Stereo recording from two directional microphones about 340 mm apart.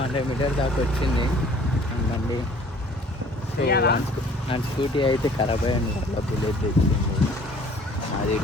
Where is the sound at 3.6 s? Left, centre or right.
Left.